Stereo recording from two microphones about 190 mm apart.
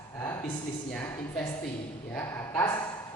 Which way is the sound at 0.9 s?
5° left (ahead or behind).